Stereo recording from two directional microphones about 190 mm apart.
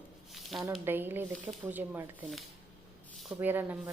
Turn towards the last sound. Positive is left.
turn(degrees=-10)  # may be behind; listen again after turning